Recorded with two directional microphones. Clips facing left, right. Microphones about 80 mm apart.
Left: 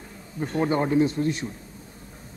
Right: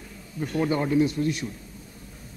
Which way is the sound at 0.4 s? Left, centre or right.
Left.